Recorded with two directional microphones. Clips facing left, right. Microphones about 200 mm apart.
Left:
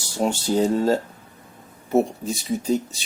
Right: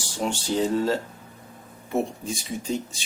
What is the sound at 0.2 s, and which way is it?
Speech, 40° left (ahead or behind).